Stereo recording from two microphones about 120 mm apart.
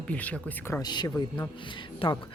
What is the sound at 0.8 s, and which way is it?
Speech, 35° left (ahead or behind).